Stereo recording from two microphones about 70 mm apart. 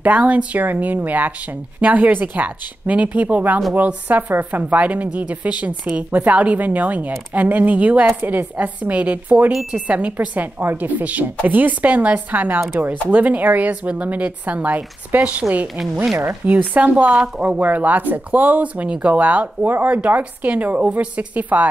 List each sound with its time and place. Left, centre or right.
0.0 s a woman's voice: right
16.4 s a woman's voice: right